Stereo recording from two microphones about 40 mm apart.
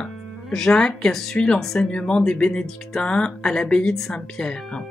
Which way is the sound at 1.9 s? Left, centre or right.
Left.